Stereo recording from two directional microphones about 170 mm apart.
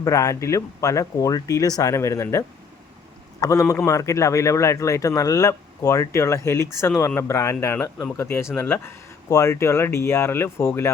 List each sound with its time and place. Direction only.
0.0 s a man's voice: 20° left (ahead or behind)
3.4 s a man's voice: 15° left (ahead or behind)